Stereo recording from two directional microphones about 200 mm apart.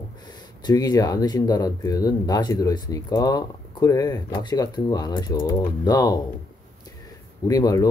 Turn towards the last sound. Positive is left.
turn(degrees=15)  # may be behind; listen again after turning